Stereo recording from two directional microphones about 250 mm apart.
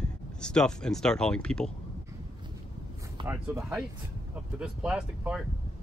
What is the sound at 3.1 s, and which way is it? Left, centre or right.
Speech, centre.